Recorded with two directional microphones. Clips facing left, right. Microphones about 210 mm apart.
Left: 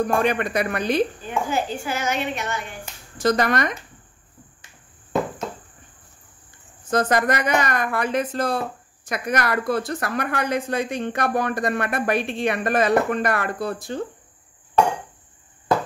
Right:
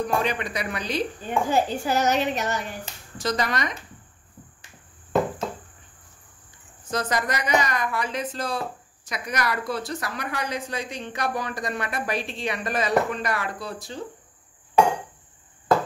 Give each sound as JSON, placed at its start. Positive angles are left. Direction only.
{"t": 0.0, "sound": "speech", "side_deg": 55}
{"t": 1.5, "sound": "a woman's voice", "side_deg": -40}
{"t": 3.2, "sound": "speech", "side_deg": 55}
{"t": 6.9, "sound": "a woman's voice", "side_deg": 55}